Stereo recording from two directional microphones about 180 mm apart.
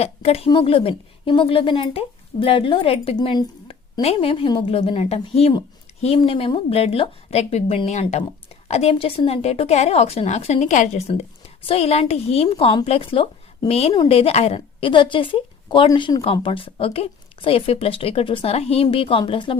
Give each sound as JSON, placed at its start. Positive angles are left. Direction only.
{"t": 0.0, "sound": "a woman's voice", "side_deg": 35}